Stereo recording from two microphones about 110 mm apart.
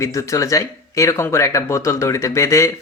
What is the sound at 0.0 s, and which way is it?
A man's voice, 30° left (ahead or behind).